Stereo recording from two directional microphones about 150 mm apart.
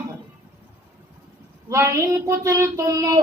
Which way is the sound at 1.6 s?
20° right (ahead or behind).